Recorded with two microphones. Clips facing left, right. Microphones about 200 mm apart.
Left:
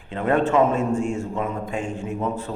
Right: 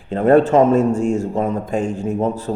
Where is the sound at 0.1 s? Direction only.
40° right (ahead or behind).